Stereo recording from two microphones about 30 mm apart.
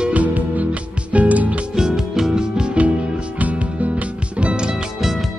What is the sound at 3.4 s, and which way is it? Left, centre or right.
Music, right.